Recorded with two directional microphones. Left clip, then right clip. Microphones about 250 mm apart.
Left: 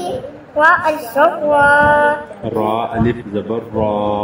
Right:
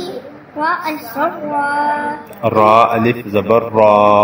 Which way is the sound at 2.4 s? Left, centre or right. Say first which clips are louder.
Right 11 dB; right.